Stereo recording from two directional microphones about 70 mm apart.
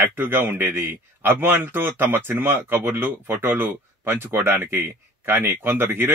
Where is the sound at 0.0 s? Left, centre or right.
Right.